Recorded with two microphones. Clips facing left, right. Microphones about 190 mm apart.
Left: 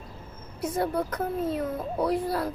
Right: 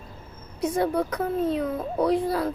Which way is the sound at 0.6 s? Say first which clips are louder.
Right 3 dB; 5° left (ahead or behind).